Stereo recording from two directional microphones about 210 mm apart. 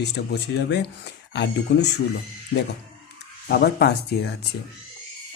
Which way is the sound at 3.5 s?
50° left (ahead or behind).